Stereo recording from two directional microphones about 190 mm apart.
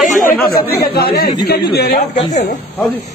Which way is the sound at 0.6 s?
55° left (ahead or behind).